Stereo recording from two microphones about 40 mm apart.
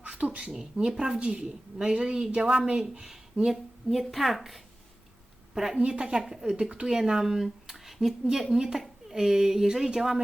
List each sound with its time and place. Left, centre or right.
0.0 s a sound: right
0.5 s a child's voice: centre
1.2 s a woman's voice: right
3.0 s a woman's voice: centre
5.5 s a child's voice: centre
5.8 s a woman's voice: right